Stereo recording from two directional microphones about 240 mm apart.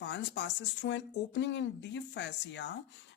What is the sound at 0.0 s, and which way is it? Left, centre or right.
Speech, left.